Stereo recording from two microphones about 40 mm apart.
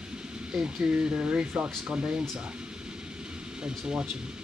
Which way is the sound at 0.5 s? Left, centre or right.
Centre.